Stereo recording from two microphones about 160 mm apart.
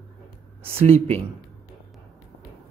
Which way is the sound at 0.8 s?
40° right (ahead or behind).